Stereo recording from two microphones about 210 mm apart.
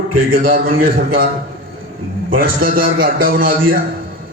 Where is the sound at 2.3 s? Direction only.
45° right (ahead or behind).